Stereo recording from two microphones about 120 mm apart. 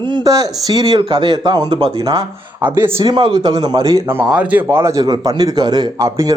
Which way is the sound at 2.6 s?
15° right (ahead or behind).